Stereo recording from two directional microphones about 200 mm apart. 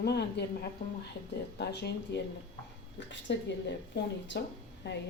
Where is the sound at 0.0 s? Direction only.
55° left (ahead or behind).